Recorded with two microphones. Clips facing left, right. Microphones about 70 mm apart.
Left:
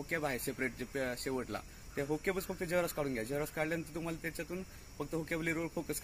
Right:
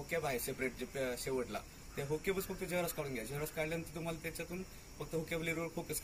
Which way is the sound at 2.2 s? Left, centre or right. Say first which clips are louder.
Left 2 dB; left.